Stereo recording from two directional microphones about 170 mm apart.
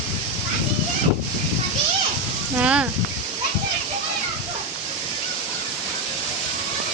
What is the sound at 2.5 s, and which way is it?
Speech, 10° right (ahead or behind).